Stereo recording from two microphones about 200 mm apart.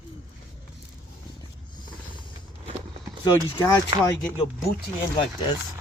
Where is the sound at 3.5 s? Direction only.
20° left (ahead or behind).